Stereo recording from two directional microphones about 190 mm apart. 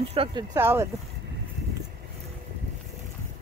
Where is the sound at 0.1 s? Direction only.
25° right (ahead or behind).